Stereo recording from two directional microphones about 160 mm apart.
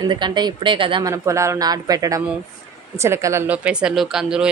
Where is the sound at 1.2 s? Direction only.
20° right (ahead or behind).